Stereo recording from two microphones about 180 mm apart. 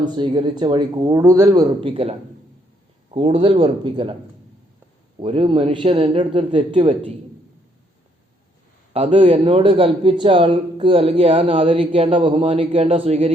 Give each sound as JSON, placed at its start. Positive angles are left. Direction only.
{"t": 0.0, "sound": "a man's voice", "side_deg": -25}
{"t": 1.8, "sound": "a man's voice", "side_deg": -30}
{"t": 5.2, "sound": "a man's voice", "side_deg": -30}
{"t": 8.9, "sound": "a man's voice", "side_deg": -30}